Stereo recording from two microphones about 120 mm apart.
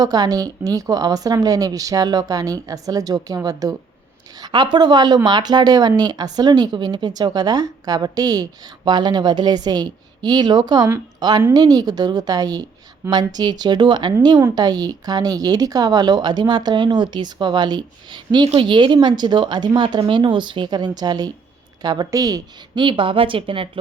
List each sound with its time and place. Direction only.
0.0 s a woman's voice: 30° right (ahead or behind)